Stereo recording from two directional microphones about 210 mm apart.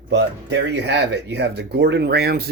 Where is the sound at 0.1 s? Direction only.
55° right (ahead or behind).